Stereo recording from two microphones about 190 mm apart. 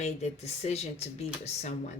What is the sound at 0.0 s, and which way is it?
Speech, 35° left (ahead or behind).